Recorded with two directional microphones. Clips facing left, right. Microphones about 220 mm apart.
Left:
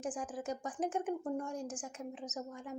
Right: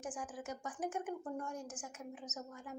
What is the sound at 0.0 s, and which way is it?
A woman's voice, 30° left (ahead or behind).